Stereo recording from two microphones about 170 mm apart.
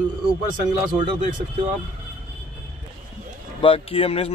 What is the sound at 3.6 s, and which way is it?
Speech, 35° left (ahead or behind).